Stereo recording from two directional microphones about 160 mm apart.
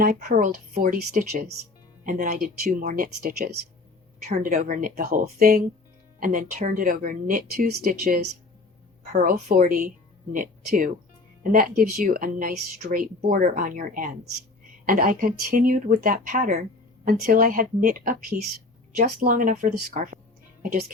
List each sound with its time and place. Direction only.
0.0 s speech: 65° right (ahead or behind)
6.1 s speech: 55° right (ahead or behind)
9.2 s a woman's voice: 50° right (ahead or behind)